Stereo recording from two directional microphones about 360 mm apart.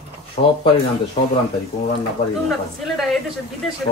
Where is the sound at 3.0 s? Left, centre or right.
Centre.